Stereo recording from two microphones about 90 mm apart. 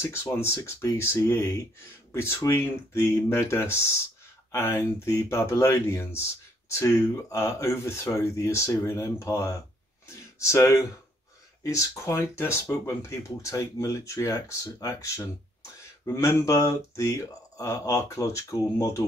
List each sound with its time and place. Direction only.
0.0 s speech: 30° left (ahead or behind)
10.0 s a sound: 30° left (ahead or behind)
11.6 s speech: 40° left (ahead or behind)